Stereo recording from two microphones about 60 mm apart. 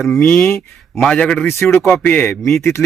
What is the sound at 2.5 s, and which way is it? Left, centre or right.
Speech, left.